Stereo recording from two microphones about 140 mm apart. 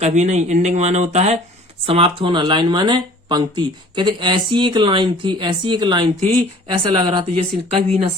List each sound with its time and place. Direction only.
0.0 s speech: 55° right (ahead or behind)
1.9 s speech: 40° right (ahead or behind)